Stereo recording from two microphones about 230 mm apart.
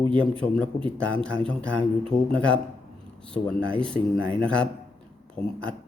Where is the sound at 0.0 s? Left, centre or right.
Right.